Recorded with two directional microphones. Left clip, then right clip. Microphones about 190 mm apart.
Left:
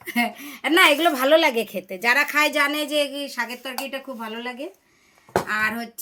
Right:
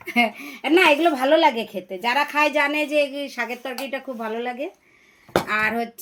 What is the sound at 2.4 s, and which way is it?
Speech, 45° left (ahead or behind).